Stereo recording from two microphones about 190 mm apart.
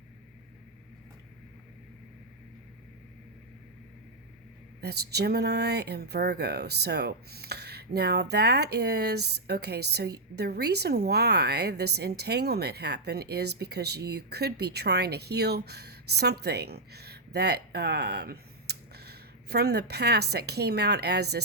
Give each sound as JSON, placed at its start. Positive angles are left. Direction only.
{"t": 4.8, "sound": "a woman's voice", "side_deg": -60}